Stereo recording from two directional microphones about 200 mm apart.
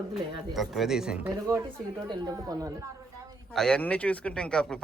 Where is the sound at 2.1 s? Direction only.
20° right (ahead or behind).